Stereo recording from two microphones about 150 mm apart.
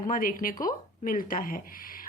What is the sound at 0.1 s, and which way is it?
A woman's voice, 70° left (ahead or behind).